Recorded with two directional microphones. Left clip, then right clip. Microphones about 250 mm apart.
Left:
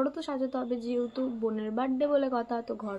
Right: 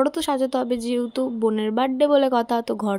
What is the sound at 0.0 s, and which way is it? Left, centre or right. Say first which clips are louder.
Speech: right 10 dB; right.